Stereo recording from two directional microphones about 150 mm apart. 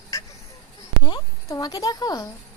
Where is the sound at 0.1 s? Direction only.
20° left (ahead or behind).